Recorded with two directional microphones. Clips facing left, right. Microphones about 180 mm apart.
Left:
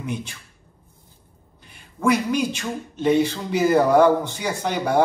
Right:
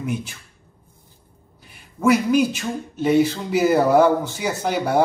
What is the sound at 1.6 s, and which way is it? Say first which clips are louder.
Speech: right 3 dB; 5° right (ahead or behind).